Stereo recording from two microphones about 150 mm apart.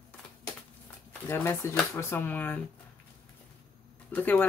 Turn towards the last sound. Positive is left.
turn(degrees=10)  # may be behind; listen again after turning